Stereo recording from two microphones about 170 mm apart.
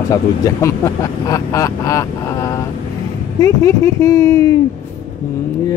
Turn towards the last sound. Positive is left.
turn(degrees=20)  # may be behind; listen again after turning